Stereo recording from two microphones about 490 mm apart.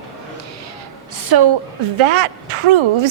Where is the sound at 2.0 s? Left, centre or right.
Right.